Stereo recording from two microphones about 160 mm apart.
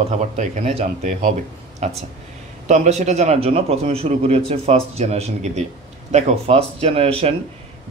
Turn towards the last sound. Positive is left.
turn(degrees=-40)  # may be behind; listen again after turning